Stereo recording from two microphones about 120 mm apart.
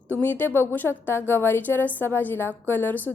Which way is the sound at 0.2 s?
15° left (ahead or behind).